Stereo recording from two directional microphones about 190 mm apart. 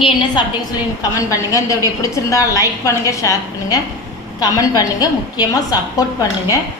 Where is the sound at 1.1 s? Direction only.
15° left (ahead or behind).